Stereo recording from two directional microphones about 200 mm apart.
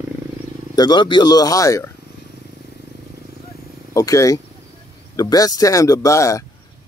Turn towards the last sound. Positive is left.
turn(degrees=15)  # may be behind; listen again after turning